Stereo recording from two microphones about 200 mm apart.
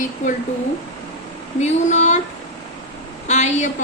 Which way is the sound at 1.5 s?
35° left (ahead or behind).